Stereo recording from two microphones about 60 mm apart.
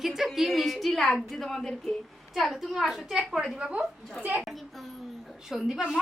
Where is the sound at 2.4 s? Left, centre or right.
Centre.